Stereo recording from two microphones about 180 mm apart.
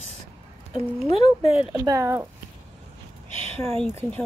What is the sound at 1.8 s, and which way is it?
Speech, 15° right (ahead or behind).